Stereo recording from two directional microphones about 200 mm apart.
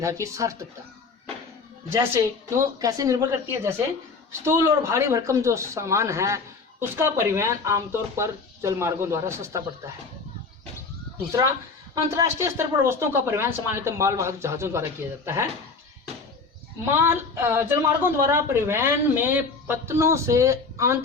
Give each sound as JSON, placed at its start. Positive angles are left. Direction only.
{"t": 0.0, "sound": "speech", "side_deg": -15}
{"t": 2.2, "sound": "speech", "side_deg": -15}
{"t": 11.9, "sound": "speech", "side_deg": -15}
{"t": 16.9, "sound": "speech", "side_deg": -10}